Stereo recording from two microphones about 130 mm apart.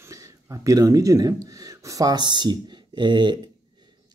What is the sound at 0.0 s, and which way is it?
Speech, 25° right (ahead or behind).